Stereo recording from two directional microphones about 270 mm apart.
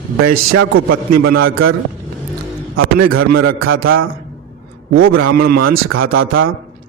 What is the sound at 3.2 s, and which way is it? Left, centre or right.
Speech, right.